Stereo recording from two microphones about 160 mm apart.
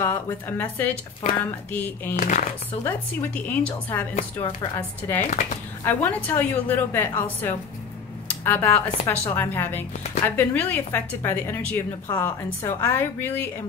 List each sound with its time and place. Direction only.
0.0 s a woman's voice: 15° left (ahead or behind)
2.1 s speech: 55° left (ahead or behind)
2.8 s a woman's voice: 10° left (ahead or behind)